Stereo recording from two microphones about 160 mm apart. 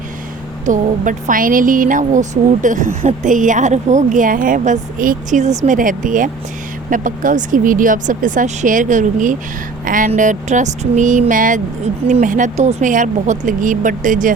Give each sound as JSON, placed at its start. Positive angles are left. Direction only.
{"t": 0.6, "sound": "speech", "side_deg": -55}